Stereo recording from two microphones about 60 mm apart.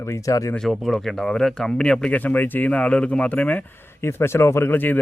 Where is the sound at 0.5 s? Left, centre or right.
Centre.